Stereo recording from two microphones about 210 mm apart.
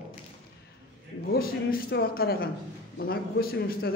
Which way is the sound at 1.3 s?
45° left (ahead or behind).